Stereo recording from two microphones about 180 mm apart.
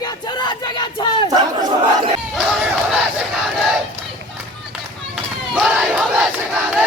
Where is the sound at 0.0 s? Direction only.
25° left (ahead or behind).